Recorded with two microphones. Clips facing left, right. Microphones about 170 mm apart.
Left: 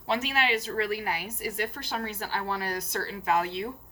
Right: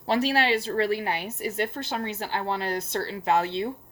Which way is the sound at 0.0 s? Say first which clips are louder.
Right 5 dB; 35° right (ahead or behind).